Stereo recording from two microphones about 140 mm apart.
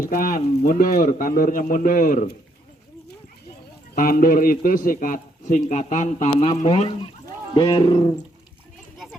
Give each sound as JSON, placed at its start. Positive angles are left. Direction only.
{"t": 0.0, "sound": "a man's voice", "side_deg": 85}
{"t": 3.9, "sound": "a man's voice", "side_deg": 85}
{"t": 6.7, "sound": "speech", "side_deg": 40}